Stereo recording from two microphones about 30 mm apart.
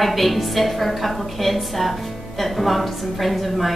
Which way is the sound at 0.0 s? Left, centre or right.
Centre.